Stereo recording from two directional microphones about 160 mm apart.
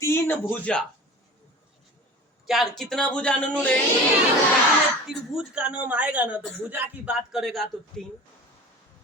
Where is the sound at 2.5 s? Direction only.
Centre (ahead or behind).